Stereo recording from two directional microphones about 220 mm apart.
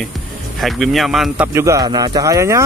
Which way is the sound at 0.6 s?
Centre (ahead or behind).